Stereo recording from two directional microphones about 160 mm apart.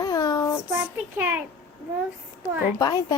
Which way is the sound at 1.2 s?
10° right (ahead or behind).